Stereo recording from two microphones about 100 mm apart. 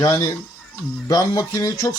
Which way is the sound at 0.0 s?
40° left (ahead or behind).